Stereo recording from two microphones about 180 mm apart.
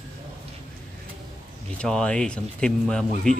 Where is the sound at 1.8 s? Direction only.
5° left (ahead or behind).